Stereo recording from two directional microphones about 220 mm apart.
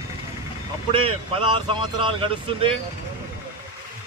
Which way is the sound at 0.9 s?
25° right (ahead or behind).